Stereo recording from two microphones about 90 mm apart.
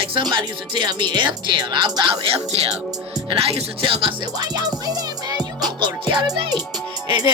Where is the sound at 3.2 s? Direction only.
85° right.